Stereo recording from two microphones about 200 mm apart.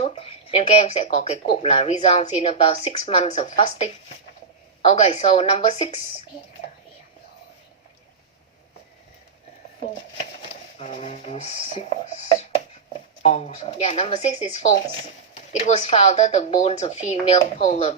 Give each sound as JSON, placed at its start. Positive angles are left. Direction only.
{"t": 0.0, "sound": "speech", "side_deg": 30}
{"t": 10.8, "sound": "speech", "side_deg": 30}